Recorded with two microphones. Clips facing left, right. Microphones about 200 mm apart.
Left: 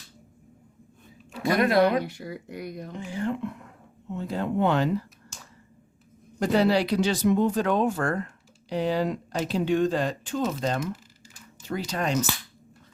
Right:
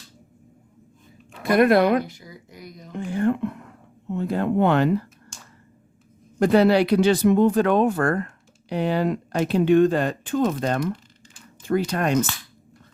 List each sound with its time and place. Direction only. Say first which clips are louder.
1.4 s speech: right 4 dB; 55° right (ahead or behind)
2.0 s speech: left 6 dB; 65° left (ahead or behind)
2.9 s speech: right 8 dB; 55° right (ahead or behind)
6.4 s speech: right 5 dB; 60° right (ahead or behind)